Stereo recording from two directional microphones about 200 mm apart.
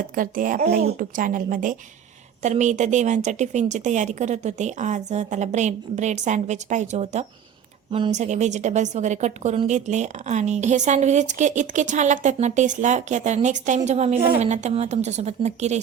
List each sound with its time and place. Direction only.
0.2 s a woman's voice: 45° right (ahead or behind)